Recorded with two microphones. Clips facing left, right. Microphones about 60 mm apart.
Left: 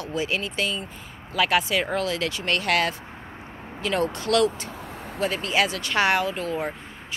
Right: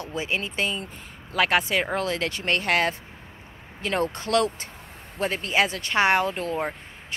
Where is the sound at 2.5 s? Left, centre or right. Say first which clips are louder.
Even; right.